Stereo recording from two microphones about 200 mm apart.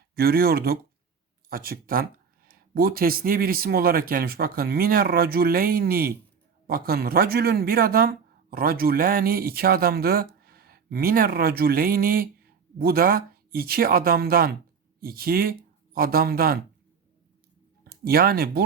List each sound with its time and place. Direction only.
0.2 s speech: 50° right (ahead or behind)
17.8 s speech: 50° right (ahead or behind)